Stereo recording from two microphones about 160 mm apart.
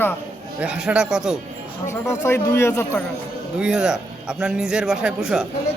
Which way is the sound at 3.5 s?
5° right (ahead or behind).